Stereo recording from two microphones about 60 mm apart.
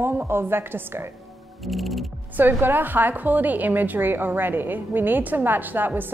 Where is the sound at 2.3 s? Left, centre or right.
Right.